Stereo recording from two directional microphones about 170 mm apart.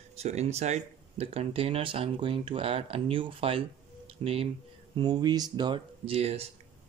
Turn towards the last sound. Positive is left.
turn(degrees=-35)  # may be behind; listen again after turning